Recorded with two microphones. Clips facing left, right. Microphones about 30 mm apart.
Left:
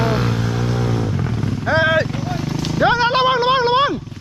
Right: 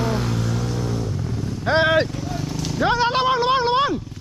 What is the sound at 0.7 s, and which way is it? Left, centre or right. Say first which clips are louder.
Vehicle: left 5 dB; left.